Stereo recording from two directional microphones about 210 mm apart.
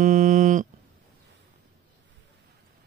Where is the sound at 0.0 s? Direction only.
40° right (ahead or behind).